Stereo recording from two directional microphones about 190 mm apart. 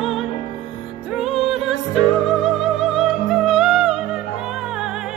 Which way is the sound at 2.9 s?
Centre (ahead or behind).